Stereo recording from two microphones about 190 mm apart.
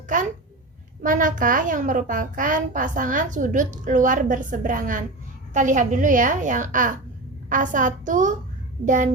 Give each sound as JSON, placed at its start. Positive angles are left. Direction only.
{"t": 0.1, "sound": "a child's voice", "side_deg": -45}